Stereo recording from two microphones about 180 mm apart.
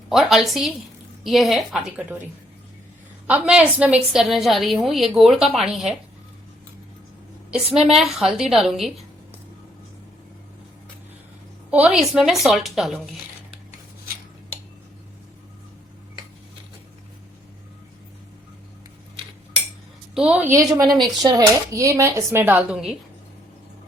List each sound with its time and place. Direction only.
0.1 s a woman's voice: centre (ahead or behind)
3.2 s a woman's voice: 5° right (ahead or behind)
7.5 s a woman's voice: centre (ahead or behind)
11.7 s a woman's voice: 5° right (ahead or behind)
20.1 s speech: 5° right (ahead or behind)